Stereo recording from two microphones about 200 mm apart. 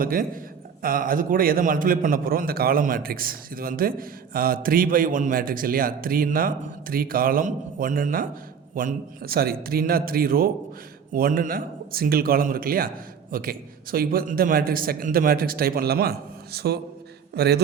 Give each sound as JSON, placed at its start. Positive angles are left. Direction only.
{"t": 0.0, "sound": "a man's voice", "side_deg": -45}